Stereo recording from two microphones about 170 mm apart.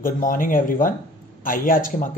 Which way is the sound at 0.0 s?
55° left (ahead or behind).